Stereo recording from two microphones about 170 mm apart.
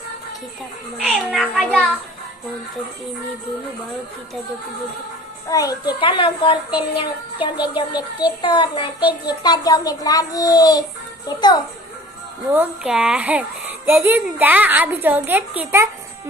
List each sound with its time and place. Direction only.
0.9 s a child's voice: 5° right (ahead or behind)
5.5 s child singing: 20° left (ahead or behind)
12.5 s speech: 5° right (ahead or behind)